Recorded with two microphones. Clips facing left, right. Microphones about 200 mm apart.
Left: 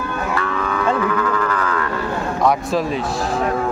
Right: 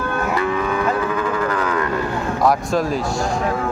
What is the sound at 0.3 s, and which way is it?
Moo, 15° right (ahead or behind).